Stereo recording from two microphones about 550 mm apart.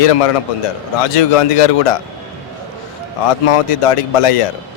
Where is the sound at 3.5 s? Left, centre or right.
Left.